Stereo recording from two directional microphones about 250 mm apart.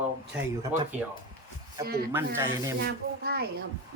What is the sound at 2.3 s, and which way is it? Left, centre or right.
Speech, centre.